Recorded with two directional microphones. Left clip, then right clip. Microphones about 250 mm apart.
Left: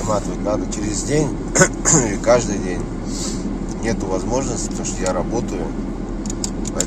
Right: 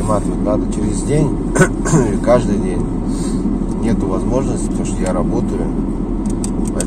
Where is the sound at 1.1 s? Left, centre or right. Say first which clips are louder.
Right 1 dB; centre.